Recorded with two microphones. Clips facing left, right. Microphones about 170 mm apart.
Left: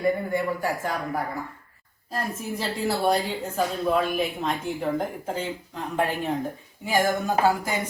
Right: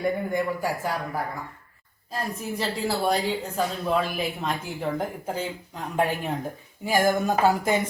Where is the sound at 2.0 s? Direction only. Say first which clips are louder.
Left 1 dB; centre (ahead or behind).